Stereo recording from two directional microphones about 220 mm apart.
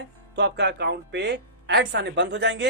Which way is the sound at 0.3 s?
50° right (ahead or behind).